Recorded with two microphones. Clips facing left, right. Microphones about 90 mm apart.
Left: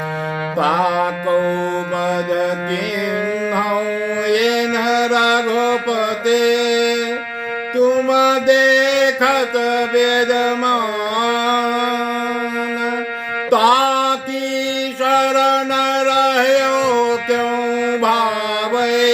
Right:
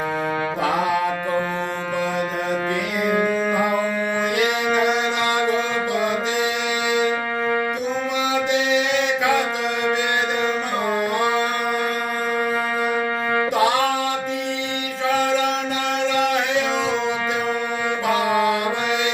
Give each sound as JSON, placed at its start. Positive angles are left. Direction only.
{"t": 0.6, "sound": "music", "side_deg": 70}
{"t": 4.3, "sound": "mantra", "side_deg": 70}
{"t": 7.8, "sound": "mantra", "side_deg": 65}
{"t": 9.9, "sound": "music", "side_deg": 65}
{"t": 13.5, "sound": "music", "side_deg": 70}
{"t": 15.0, "sound": "mantra", "side_deg": 70}
{"t": 18.8, "sound": "music", "side_deg": 75}